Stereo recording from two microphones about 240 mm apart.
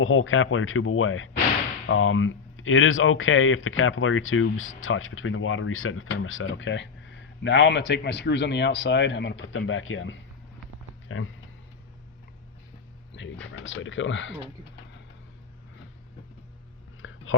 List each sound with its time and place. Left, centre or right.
0.0 s speech: left
13.4 s speech: left
17.0 s a sound: left